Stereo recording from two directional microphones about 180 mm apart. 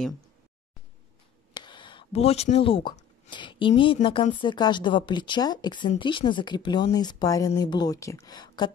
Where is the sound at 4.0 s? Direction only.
45° left (ahead or behind).